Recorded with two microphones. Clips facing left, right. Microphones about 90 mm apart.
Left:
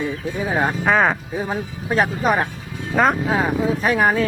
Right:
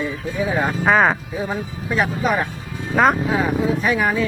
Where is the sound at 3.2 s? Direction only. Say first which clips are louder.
Even; 35° left (ahead or behind).